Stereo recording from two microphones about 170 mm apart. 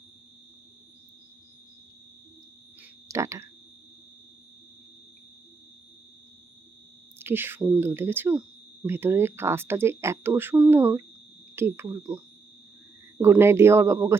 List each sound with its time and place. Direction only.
3.1 s speech: 15° right (ahead or behind)
7.2 s speech: 15° right (ahead or behind)